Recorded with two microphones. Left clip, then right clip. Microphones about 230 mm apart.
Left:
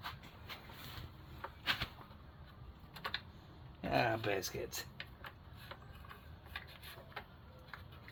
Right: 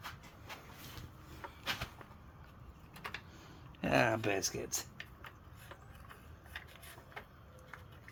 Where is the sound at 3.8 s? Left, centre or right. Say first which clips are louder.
Right 3 dB; right.